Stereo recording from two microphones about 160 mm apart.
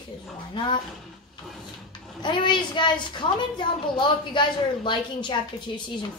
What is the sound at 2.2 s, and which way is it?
A woman's voice, 30° left (ahead or behind).